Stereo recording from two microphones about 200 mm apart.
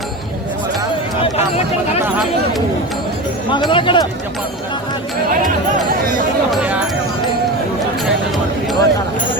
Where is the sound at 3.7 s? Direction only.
25° left (ahead or behind).